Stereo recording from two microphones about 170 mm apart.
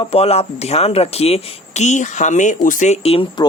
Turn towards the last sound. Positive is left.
turn(degrees=30)  # may be behind; listen again after turning